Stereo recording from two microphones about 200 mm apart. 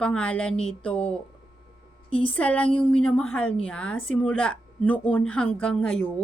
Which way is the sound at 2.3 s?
5° left (ahead or behind).